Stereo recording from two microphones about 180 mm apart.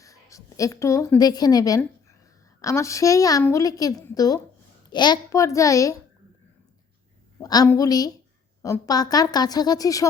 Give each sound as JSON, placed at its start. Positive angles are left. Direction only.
{"t": 0.0, "sound": "a woman's voice", "side_deg": 15}
{"t": 7.3, "sound": "a woman's voice", "side_deg": 20}